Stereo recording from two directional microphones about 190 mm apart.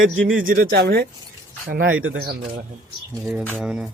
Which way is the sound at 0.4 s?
50° right (ahead or behind).